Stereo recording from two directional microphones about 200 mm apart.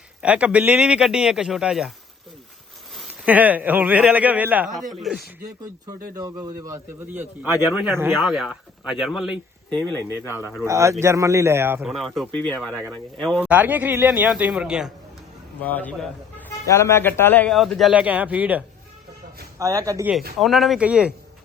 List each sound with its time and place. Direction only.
0.2 s speech: 5° right (ahead or behind)
2.9 s speech: 10° right (ahead or behind)
6.1 s speech: 20° right (ahead or behind)
11.8 s speech: centre (ahead or behind)
15.6 s a man's voice: 10° left (ahead or behind); by 20.1 s 15° right (ahead or behind)
20.4 s speech: centre (ahead or behind)